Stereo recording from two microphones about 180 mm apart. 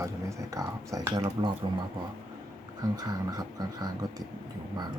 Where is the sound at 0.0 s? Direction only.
20° right (ahead or behind).